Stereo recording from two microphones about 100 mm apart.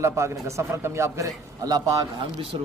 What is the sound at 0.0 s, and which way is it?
A man's voice, 30° right (ahead or behind).